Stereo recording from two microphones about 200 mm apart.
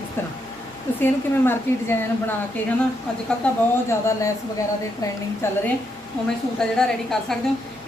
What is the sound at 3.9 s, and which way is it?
A woman's voice, 15° left (ahead or behind).